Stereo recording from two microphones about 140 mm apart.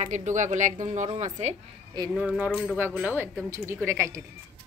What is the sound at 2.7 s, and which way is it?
A woman's voice, 10° right (ahead or behind).